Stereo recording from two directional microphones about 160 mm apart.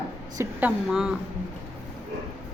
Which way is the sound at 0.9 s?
Centre (ahead or behind).